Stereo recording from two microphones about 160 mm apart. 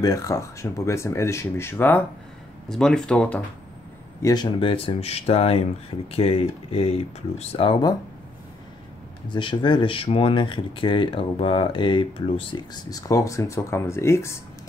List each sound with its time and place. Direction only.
0.0 s speech: 20° left (ahead or behind)
4.2 s speech: 25° left (ahead or behind)
9.3 s speech: 30° left (ahead or behind)